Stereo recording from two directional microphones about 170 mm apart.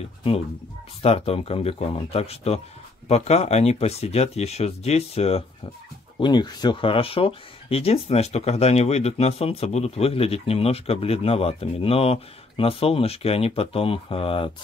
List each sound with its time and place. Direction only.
1.0 s speech: 35° left (ahead or behind)
6.1 s speech: 25° left (ahead or behind)